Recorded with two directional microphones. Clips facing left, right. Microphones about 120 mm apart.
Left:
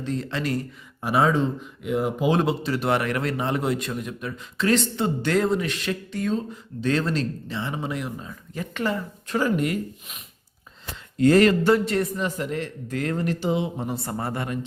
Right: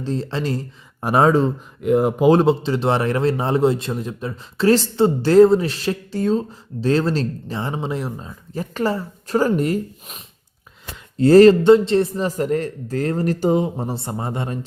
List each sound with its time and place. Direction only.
0.0 s a man's voice: 30° right (ahead or behind)
1.0 s speech: 45° right (ahead or behind)
2.4 s a man's voice: 30° right (ahead or behind)